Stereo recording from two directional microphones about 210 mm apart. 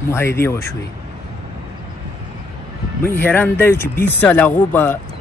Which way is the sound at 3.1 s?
10° left (ahead or behind).